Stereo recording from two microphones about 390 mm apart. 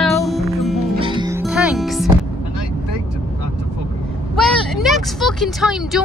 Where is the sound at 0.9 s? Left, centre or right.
Centre.